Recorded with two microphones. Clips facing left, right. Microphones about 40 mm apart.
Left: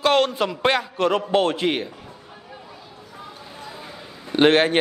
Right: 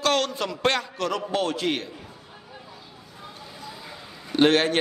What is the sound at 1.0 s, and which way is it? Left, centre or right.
Speech, left.